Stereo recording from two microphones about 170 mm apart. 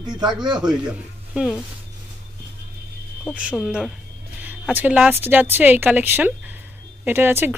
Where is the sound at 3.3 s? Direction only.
5° right (ahead or behind).